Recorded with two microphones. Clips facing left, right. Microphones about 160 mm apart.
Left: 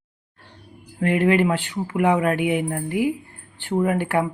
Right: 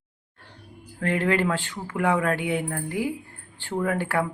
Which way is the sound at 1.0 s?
15° left (ahead or behind).